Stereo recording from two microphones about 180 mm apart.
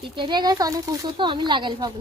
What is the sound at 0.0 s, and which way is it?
A woman's voice, 25° right (ahead or behind).